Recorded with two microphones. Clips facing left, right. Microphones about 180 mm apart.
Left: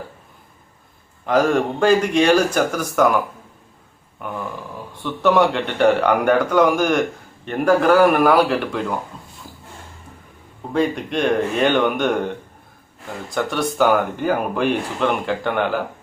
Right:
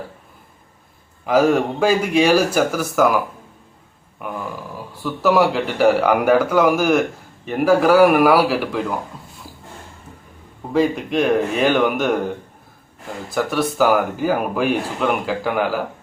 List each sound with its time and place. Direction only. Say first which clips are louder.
1.2 s a man's voice: right 2 dB; 5° right (ahead or behind)
4.2 s a man's voice: even; 5° right (ahead or behind)
9.5 s a sound: even; 10° right (ahead or behind)
10.7 s a man's voice: right 2 dB; centre (ahead or behind)
13.3 s a man's voice: right 2 dB; 5° right (ahead or behind)